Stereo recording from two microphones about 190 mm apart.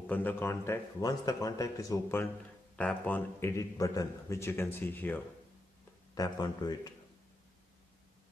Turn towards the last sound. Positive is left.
turn(degrees=20)  # may be behind; listen again after turning